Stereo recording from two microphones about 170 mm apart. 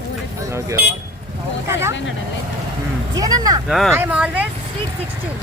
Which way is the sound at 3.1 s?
20° right (ahead or behind).